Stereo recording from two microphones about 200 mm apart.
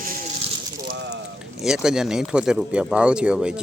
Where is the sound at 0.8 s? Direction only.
60° right (ahead or behind).